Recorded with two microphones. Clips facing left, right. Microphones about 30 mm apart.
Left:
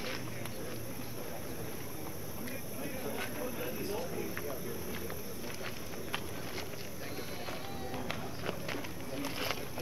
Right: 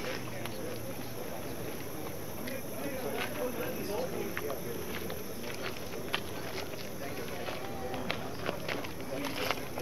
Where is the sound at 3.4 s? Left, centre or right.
Centre.